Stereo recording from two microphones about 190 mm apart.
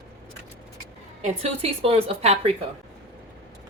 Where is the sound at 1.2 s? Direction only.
35° right (ahead or behind).